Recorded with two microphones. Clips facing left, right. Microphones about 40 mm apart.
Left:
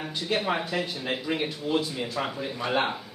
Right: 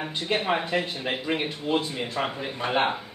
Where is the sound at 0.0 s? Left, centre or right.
Right.